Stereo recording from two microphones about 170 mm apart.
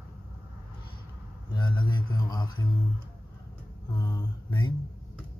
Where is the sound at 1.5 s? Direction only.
25° left (ahead or behind).